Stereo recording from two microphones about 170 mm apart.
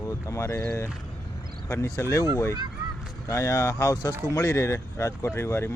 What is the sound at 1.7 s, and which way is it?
Speech, 15° left (ahead or behind).